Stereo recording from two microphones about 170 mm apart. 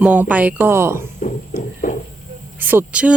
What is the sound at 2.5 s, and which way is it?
Speech, 10° right (ahead or behind).